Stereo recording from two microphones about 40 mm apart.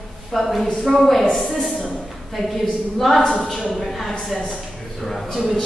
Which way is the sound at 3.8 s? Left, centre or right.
Centre.